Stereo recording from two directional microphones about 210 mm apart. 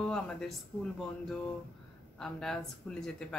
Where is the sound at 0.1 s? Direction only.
Centre (ahead or behind).